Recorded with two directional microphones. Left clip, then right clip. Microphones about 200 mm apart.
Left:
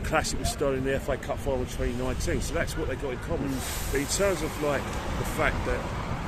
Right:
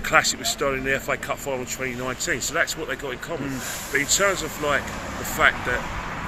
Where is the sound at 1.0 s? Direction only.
Centre (ahead or behind).